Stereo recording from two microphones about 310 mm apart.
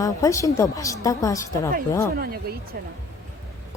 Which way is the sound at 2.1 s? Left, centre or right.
Right.